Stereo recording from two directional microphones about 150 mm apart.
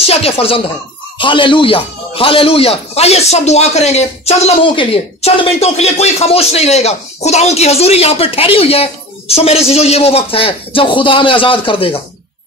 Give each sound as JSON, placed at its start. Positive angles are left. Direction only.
{"t": 0.0, "sound": "a man's voice", "side_deg": 40}